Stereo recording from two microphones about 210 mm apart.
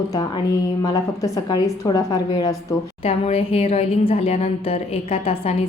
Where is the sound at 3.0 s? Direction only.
30° left (ahead or behind).